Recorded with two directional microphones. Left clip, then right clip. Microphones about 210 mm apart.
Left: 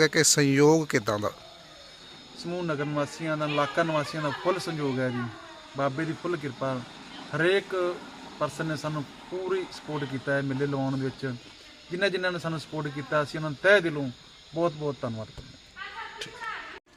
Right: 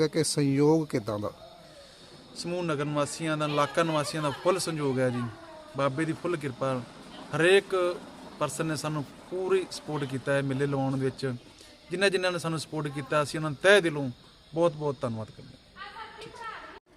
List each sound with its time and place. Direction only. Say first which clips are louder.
0.0 s speech: left 5 dB; centre (ahead or behind)
2.4 s a man's voice: even; 30° right (ahead or behind)
14.8 s a man's voice: right 1 dB; 20° right (ahead or behind)